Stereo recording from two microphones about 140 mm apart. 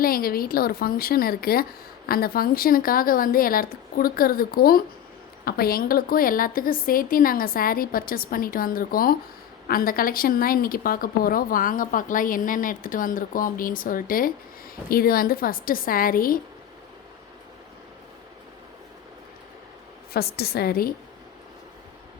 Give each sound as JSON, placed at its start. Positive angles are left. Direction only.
{"t": 0.0, "sound": "a woman's voice", "side_deg": 90}
{"t": 20.1, "sound": "a woman's voice", "side_deg": 90}